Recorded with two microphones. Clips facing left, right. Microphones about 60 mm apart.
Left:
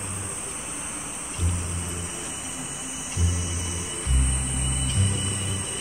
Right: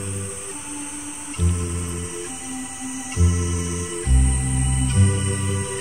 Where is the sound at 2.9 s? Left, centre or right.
Right.